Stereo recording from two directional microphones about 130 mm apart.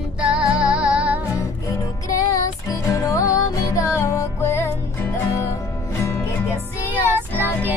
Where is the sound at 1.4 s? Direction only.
25° left (ahead or behind).